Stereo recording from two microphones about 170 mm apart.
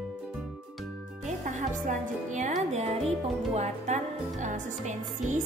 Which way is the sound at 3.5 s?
45° right (ahead or behind).